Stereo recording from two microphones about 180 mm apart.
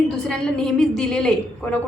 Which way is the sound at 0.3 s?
5° left (ahead or behind).